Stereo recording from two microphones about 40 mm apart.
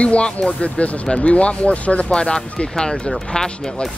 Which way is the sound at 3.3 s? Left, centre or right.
Centre.